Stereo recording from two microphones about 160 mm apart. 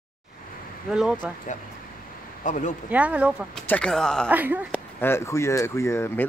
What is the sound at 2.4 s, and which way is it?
Speech, 50° left (ahead or behind).